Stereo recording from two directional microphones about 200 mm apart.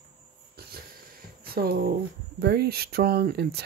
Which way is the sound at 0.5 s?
50° right (ahead or behind).